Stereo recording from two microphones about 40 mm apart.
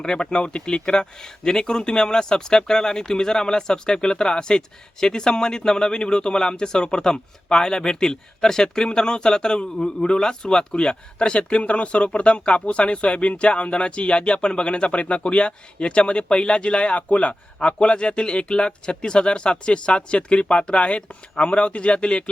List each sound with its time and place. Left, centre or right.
0.0 s speech: centre